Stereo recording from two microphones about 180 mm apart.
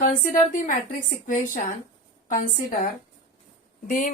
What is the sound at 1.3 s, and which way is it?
Speech, 45° left (ahead or behind).